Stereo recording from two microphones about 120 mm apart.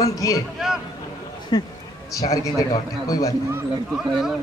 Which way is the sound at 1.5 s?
30° left (ahead or behind).